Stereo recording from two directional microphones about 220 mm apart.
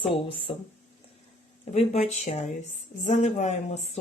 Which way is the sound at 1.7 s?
30° left (ahead or behind).